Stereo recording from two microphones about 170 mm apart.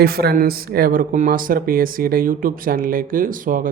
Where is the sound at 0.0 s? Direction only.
65° right (ahead or behind).